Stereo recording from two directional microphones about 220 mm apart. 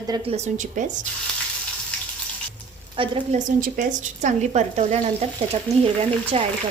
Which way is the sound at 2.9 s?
25° right (ahead or behind).